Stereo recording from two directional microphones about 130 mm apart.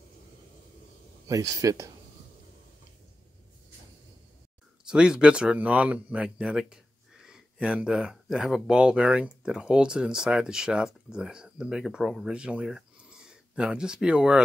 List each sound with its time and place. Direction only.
1.2 s speech: 25° right (ahead or behind)
4.8 s speech: 5° right (ahead or behind)